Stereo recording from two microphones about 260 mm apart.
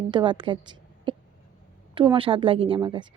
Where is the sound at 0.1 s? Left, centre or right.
Centre.